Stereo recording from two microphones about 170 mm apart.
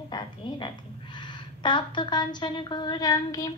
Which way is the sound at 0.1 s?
30° left (ahead or behind).